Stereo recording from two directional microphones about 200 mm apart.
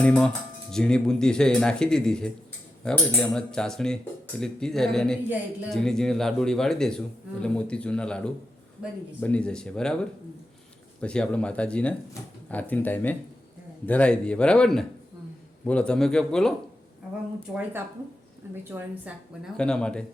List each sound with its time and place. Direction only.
0.0 s speech: 5° left (ahead or behind)
18.7 s a woman's voice: 10° right (ahead or behind)
19.5 s speech: 5° left (ahead or behind)